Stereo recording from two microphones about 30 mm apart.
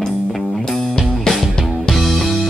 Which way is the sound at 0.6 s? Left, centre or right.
Centre.